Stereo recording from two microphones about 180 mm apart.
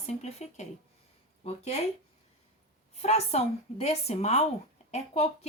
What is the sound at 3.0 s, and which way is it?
Speech, 35° left (ahead or behind).